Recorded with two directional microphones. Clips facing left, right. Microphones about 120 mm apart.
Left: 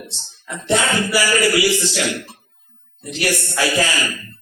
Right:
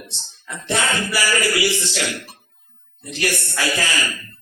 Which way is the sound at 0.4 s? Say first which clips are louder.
Left 4 dB; 20° left (ahead or behind).